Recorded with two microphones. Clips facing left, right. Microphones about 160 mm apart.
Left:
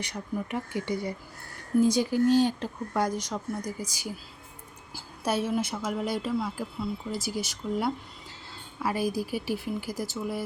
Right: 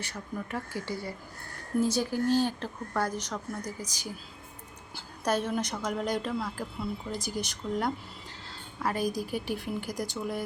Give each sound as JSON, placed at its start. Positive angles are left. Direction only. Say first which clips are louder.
{"t": 0.0, "sound": "speech", "louder": "left 4 dB", "side_deg": 15}
{"t": 5.2, "sound": "speech", "louder": "left 1 dB", "side_deg": 10}